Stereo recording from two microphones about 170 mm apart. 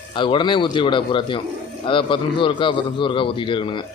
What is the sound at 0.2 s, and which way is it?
Speech, 30° left (ahead or behind).